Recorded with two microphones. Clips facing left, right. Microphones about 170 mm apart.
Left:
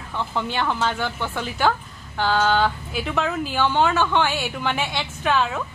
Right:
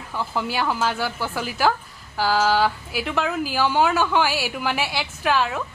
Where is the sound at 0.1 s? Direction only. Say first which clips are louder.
Even; 5° right (ahead or behind).